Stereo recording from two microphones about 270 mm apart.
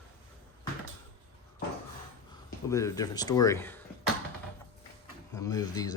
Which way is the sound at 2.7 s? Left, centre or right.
Centre.